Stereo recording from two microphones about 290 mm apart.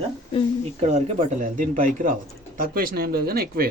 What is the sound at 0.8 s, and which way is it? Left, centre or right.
Speech, right.